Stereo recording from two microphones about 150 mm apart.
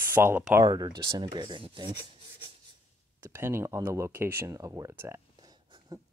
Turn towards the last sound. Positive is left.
turn(degrees=-15)  # may be behind; listen again after turning